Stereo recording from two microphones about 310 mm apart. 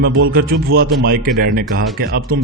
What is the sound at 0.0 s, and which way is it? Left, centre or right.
A man's voice, right.